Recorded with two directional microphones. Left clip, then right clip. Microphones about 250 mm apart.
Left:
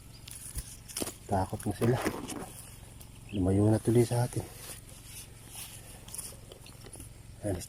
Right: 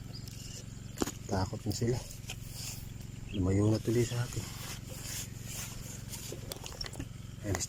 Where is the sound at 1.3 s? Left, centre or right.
Centre.